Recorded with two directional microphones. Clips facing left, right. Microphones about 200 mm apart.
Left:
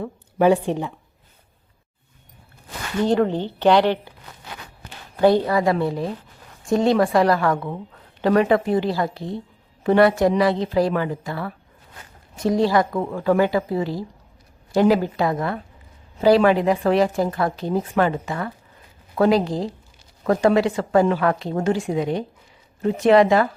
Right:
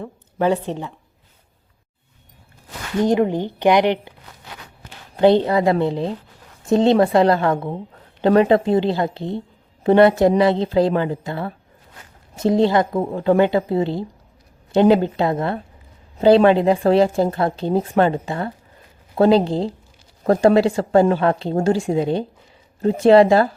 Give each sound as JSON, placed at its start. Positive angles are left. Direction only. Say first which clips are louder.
{"t": 0.0, "sound": "speech", "louder": "left 3 dB", "side_deg": 10}
{"t": 3.0, "sound": "speech", "louder": "right 2 dB", "side_deg": -15}
{"t": 5.1, "sound": "a woman's voice", "louder": "right 2 dB", "side_deg": -25}